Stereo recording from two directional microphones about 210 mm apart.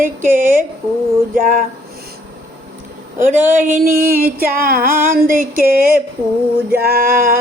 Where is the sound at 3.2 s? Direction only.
35° right (ahead or behind).